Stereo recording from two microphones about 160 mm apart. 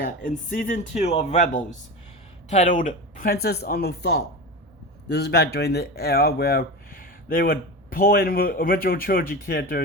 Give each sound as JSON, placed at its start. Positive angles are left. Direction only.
{"t": 0.0, "sound": "speech", "side_deg": 55}
{"t": 1.0, "sound": "speech", "side_deg": 40}